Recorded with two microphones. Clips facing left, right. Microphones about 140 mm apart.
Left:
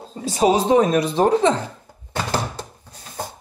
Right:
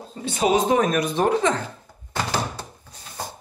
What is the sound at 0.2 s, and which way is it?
Speech, 35° left (ahead or behind).